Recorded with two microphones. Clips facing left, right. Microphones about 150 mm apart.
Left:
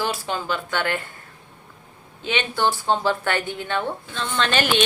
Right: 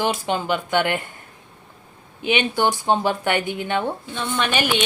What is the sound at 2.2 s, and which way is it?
Speech, 15° right (ahead or behind).